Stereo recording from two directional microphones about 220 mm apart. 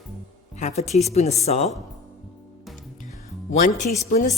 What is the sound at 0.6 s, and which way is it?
Speech, 30° left (ahead or behind).